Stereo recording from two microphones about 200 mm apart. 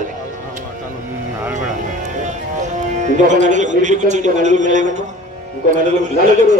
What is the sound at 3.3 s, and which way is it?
A man's voice, 40° right (ahead or behind).